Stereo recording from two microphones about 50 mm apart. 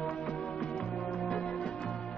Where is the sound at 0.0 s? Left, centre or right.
Centre.